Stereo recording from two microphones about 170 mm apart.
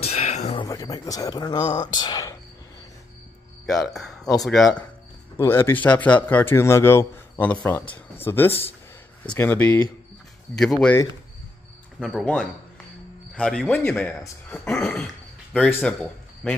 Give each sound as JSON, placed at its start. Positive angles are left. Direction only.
{"t": 0.0, "sound": "a sound", "side_deg": 40}
{"t": 0.6, "sound": "speech", "side_deg": 20}
{"t": 3.6, "sound": "speech", "side_deg": 0}
{"t": 5.4, "sound": "speech", "side_deg": 15}
{"t": 12.0, "sound": "a man's voice", "side_deg": 0}